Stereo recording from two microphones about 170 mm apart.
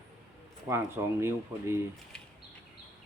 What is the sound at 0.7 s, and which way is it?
Speech, 15° right (ahead or behind).